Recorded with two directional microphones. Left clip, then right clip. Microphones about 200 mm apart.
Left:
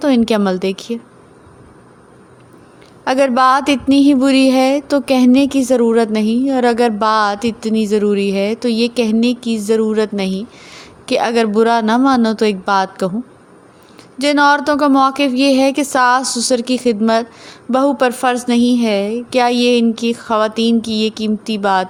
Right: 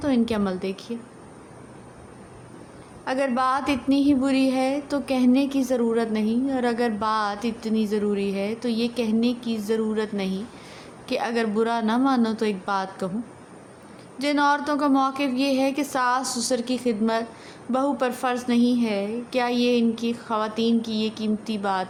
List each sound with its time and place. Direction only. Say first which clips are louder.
0.0 s a woman's voice: left 10 dB; 45° left (ahead or behind)
3.0 s a woman's voice: left 11 dB; 45° left (ahead or behind)
14.2 s a woman's voice: left 10 dB; 40° left (ahead or behind)